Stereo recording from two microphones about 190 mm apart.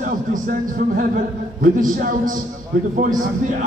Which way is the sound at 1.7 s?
45° right (ahead or behind).